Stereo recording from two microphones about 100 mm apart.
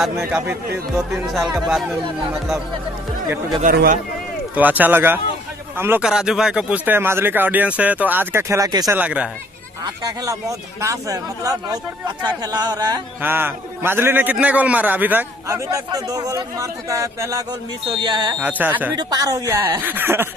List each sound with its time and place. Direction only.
0.3 s speech: 20° right (ahead or behind)
1.1 s speech: centre (ahead or behind)
4.6 s speech: 15° right (ahead or behind)
6.0 s speech: 5° right (ahead or behind); by 8.9 s 35° right (ahead or behind)
8.9 s a man's voice: 15° right (ahead or behind)
9.8 s a man's voice: 40° right (ahead or behind)
13.2 s a man's voice: 20° right (ahead or behind)
15.4 s a man's voice: 30° right (ahead or behind)
18.4 s a man's voice: 15° right (ahead or behind)
18.9 s a man's voice: 40° right (ahead or behind)
19.8 s speech: 20° right (ahead or behind)